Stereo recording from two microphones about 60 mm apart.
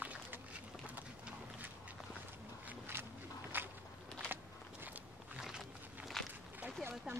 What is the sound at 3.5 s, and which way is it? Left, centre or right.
Walk, right.